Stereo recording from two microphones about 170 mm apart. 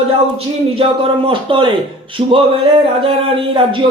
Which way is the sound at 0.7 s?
35° right (ahead or behind).